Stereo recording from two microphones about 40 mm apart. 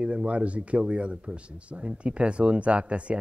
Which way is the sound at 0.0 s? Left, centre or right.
Right.